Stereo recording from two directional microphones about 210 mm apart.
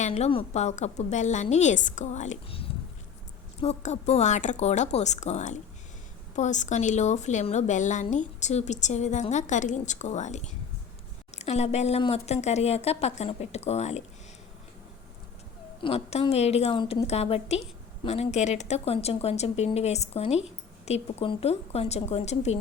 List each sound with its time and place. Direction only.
0.0 s a woman's voice: 30° left (ahead or behind)
15.8 s a woman's voice: 30° left (ahead or behind)